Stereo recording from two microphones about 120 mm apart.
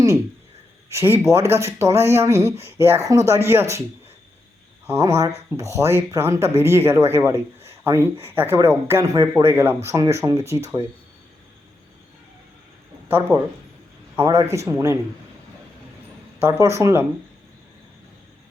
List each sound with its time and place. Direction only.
0.9 s a man's voice: 20° right (ahead or behind)
4.9 s speech: 25° right (ahead or behind)
13.1 s speech: 20° right (ahead or behind)
16.4 s speech: 20° right (ahead or behind)